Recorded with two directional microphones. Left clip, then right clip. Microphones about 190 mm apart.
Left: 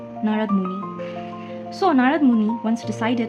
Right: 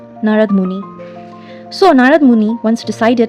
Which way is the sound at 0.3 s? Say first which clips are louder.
Right 12 dB; 50° right (ahead or behind).